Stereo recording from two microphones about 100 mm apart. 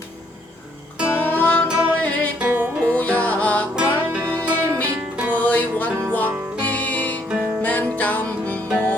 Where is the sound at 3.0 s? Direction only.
15° left (ahead or behind).